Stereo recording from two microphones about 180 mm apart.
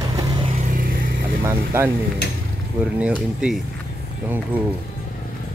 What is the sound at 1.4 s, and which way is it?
Speech, 15° right (ahead or behind).